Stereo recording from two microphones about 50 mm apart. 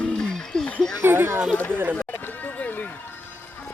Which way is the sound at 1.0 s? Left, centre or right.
Right.